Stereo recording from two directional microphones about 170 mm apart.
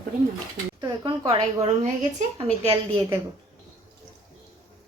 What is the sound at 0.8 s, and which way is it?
A woman's voice, 25° right (ahead or behind).